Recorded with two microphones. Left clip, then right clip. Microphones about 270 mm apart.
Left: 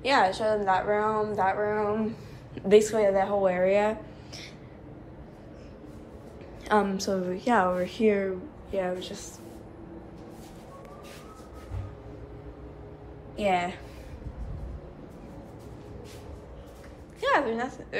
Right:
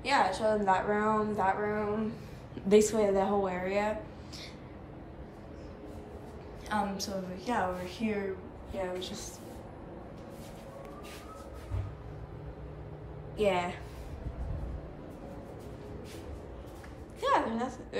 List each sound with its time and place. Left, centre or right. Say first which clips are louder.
0.0 s a woman's voice: left 4 dB; centre
3.6 s a woman's voice: left 8 dB; centre
6.7 s a woman's voice: left 8 dB; centre
13.4 s a woman's voice: left 3 dB; centre
17.2 s a woman's voice: left 4 dB; centre